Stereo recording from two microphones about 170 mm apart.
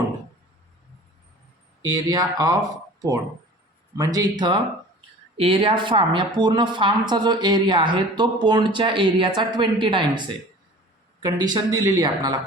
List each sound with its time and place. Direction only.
1.9 s speech: 25° right (ahead or behind)
3.9 s speech: 20° right (ahead or behind)